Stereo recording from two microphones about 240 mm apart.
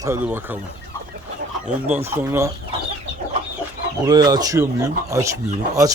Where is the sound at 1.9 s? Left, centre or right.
Centre.